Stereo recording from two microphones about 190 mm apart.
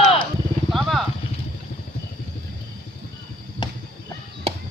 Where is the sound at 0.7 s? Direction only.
Centre (ahead or behind).